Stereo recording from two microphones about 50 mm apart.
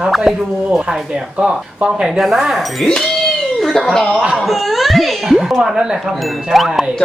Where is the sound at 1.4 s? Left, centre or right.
Centre.